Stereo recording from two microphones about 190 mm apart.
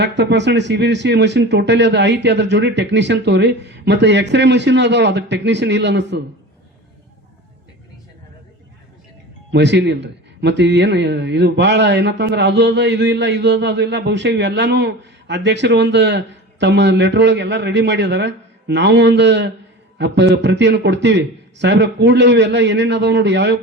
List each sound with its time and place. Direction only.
0.0 s speech: 65° right (ahead or behind)
9.5 s a man's voice: 70° right (ahead or behind)